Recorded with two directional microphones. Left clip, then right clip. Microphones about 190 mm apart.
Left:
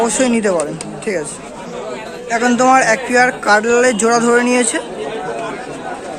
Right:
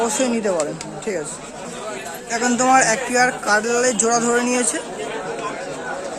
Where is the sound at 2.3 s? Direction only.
5° right (ahead or behind).